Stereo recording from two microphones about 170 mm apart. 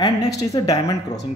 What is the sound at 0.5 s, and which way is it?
Speech, 20° left (ahead or behind).